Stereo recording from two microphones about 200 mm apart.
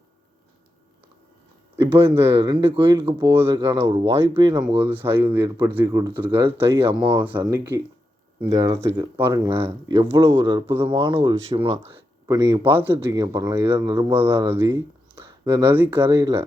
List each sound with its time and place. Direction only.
1.8 s speech: 10° right (ahead or behind)
4.6 s speech: 10° right (ahead or behind)
9.0 s speech: 15° right (ahead or behind)